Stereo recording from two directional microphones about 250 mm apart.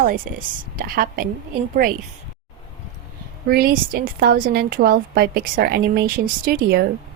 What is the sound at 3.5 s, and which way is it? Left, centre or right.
Speech, right.